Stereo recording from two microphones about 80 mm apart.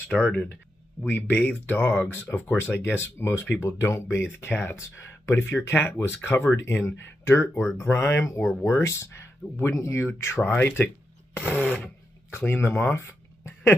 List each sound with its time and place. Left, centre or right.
0.1 s speech: centre
3.6 s speech: left
4.7 s speech: left; by 11.8 s centre
12.3 s speech: left